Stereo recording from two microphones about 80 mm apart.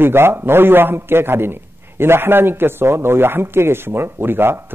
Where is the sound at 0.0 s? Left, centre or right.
Right.